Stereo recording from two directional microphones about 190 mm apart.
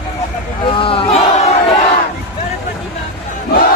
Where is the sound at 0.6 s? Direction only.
30° left (ahead or behind).